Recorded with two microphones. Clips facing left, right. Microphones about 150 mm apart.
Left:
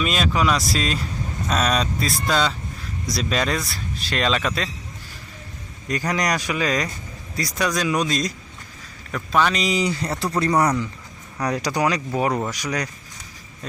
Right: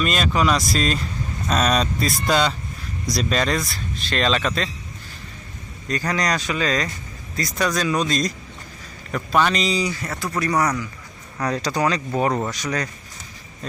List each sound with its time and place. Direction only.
0.0 s speech: centre (ahead or behind)
5.9 s speech: 15° left (ahead or behind)
9.1 s speech: 5° right (ahead or behind)
9.6 s speech: 20° left (ahead or behind)
11.3 s speech: 15° left (ahead or behind)